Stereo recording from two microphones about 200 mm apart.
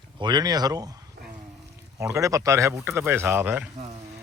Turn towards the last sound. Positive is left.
turn(degrees=-10)  # may be behind; listen again after turning